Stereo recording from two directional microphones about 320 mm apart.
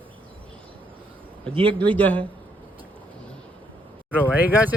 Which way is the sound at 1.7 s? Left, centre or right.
Centre.